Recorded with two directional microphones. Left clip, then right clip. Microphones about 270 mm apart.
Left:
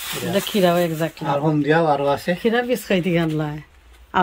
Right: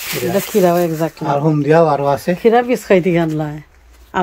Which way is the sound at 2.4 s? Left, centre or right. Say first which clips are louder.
Right 11 dB; centre.